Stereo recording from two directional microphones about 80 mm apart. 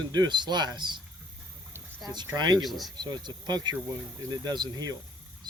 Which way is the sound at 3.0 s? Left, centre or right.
Right.